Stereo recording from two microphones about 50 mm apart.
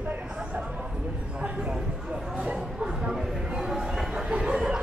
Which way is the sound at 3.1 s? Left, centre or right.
Centre.